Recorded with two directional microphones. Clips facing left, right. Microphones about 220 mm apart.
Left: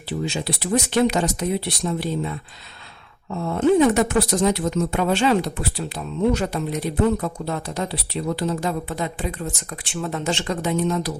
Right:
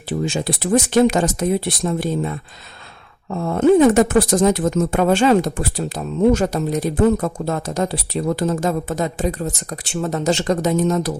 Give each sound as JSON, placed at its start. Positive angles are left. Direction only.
{"t": 0.1, "sound": "speech", "side_deg": -50}